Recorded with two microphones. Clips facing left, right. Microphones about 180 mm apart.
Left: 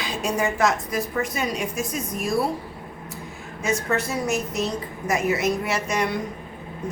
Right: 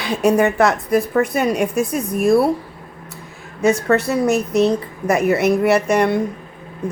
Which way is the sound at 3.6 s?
65° right (ahead or behind).